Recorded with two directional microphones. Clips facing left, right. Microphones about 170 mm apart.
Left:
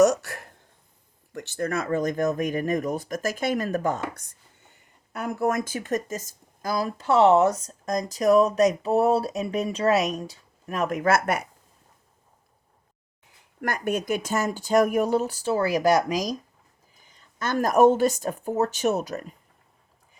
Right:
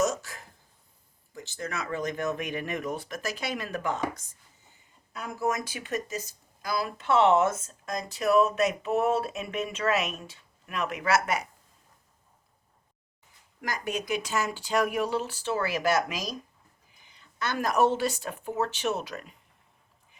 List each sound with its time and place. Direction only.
0.0 s a sound: 65° left (ahead or behind)
1.3 s speech: 65° left (ahead or behind); by 4.0 s 45° left (ahead or behind)
4.1 s speech: 65° left (ahead or behind)
13.6 s speech: 60° left (ahead or behind); by 19.4 s 40° left (ahead or behind)